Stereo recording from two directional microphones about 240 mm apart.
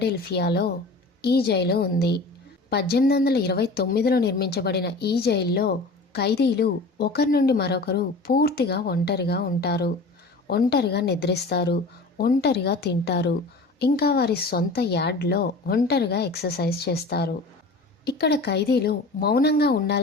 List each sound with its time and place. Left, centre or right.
0.0 s a woman's voice: left